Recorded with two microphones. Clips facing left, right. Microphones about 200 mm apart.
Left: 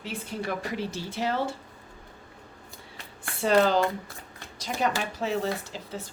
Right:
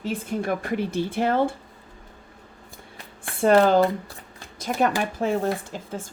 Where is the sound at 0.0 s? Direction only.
50° right (ahead or behind).